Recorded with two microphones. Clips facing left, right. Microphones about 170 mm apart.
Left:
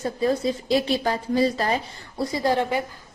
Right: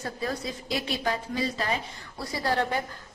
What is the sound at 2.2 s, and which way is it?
Speech, 20° left (ahead or behind).